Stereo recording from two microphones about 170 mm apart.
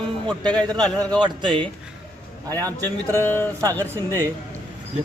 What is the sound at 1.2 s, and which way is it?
Speech, 25° right (ahead or behind).